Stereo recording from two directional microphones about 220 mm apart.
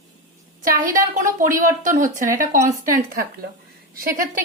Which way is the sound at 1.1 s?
35° right (ahead or behind).